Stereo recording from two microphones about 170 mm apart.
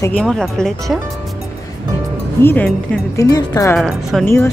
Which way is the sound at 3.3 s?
20° left (ahead or behind).